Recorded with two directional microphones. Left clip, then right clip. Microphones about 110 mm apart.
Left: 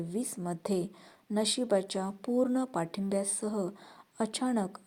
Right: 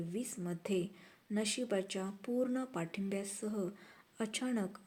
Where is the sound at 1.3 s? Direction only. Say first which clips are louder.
Left 7 dB; 40° left (ahead or behind).